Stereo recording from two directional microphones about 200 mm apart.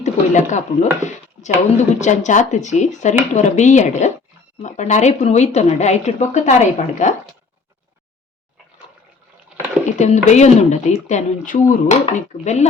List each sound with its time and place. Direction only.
0.0 s speech: 35° left (ahead or behind)
9.6 s speech: 35° left (ahead or behind)